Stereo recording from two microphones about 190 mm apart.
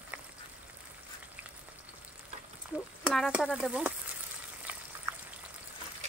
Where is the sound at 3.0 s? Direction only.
Centre (ahead or behind).